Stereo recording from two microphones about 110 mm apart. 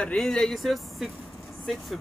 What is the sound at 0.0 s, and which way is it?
Speech, 5° left (ahead or behind).